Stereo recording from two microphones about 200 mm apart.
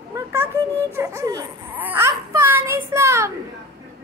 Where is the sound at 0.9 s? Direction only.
15° right (ahead or behind).